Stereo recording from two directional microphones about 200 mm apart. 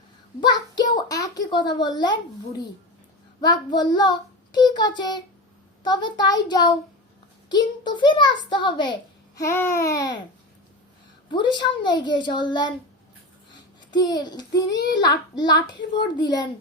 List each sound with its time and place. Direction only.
0.3 s child singing: 20° left (ahead or behind)
0.9 s a child's voice: 15° left (ahead or behind)
11.3 s a child's voice: 25° left (ahead or behind)